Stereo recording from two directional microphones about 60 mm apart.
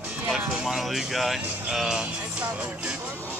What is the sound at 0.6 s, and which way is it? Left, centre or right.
Speech, centre.